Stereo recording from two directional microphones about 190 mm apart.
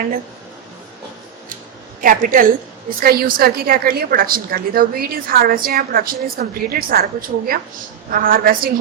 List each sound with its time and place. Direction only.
2.0 s a woman's voice: 45° right (ahead or behind)